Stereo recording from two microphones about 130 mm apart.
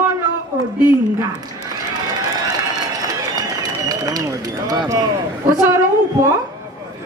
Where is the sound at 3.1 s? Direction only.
30° right (ahead or behind).